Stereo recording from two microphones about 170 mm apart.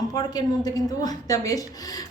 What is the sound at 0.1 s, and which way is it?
A woman's voice, 20° left (ahead or behind).